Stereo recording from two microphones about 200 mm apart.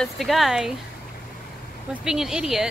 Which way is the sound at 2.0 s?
Centre (ahead or behind).